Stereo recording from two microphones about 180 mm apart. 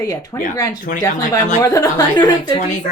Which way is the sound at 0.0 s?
20° left (ahead or behind).